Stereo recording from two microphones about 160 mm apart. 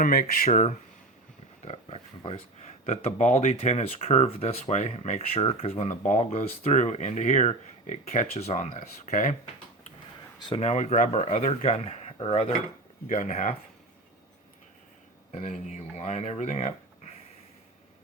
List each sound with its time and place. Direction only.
0.0 s speech: 70° left (ahead or behind)
0.4 s speech: 45° left (ahead or behind)
1.6 s a sound: 40° left (ahead or behind)
2.8 s speech: 40° left (ahead or behind)
10.4 s speech: 40° left (ahead or behind)
13.1 s speech: 50° left (ahead or behind)
15.3 s speech: 50° left (ahead or behind)